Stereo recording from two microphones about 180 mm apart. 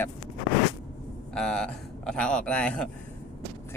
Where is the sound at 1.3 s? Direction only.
5° left (ahead or behind).